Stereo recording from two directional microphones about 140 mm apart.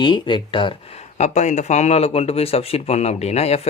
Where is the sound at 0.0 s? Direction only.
35° left (ahead or behind).